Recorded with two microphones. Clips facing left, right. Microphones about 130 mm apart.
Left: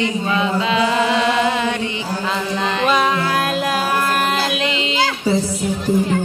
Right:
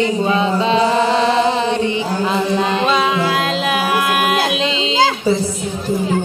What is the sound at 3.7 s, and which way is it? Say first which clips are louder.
Music: right 2 dB; 5° right (ahead or behind).